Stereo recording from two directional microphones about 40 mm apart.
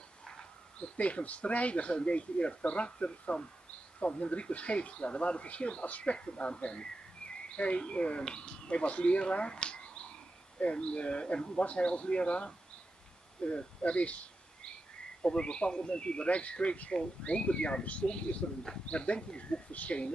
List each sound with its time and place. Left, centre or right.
0.2 s dog: centre
0.7 s speech: left
15.2 s speech: left